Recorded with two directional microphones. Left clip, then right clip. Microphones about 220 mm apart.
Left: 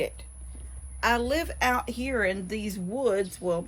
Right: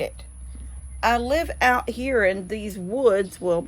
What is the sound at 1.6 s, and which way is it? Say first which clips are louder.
Speech: right 7 dB; 45° right (ahead or behind).